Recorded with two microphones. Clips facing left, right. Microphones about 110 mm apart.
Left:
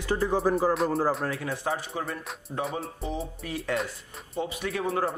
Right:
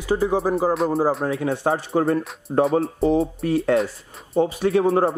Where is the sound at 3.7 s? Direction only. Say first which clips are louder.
Right 9 dB; centre (ahead or behind).